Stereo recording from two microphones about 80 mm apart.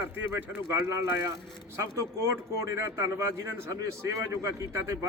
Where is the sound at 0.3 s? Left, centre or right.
Right.